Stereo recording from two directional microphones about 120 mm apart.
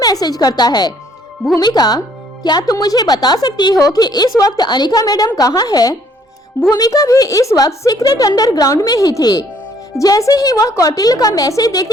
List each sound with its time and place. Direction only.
0.0 s a woman's voice: 35° left (ahead or behind)